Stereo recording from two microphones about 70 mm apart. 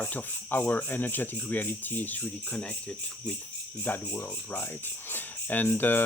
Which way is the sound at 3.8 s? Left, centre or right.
Left.